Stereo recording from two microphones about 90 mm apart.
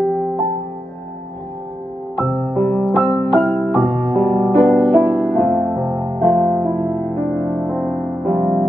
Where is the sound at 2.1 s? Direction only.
10° left (ahead or behind).